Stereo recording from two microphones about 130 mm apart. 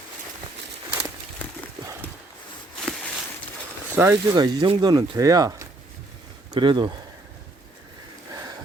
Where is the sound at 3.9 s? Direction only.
20° right (ahead or behind).